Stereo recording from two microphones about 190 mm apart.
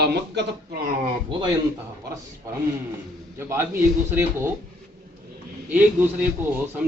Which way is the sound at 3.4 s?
10° right (ahead or behind).